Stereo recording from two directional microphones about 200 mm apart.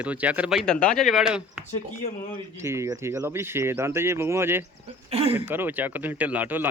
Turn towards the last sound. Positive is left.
turn(degrees=-10)  # may be behind; listen again after turning